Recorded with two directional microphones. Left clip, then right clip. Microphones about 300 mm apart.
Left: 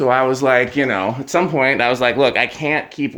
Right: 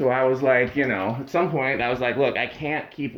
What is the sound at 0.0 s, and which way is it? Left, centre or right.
Speech, centre.